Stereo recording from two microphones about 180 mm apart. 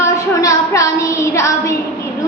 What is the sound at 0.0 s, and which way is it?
Child singing, 15° left (ahead or behind).